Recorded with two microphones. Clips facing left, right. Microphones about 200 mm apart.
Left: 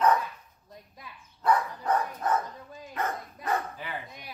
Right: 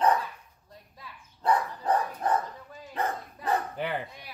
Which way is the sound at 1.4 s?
30° right (ahead or behind).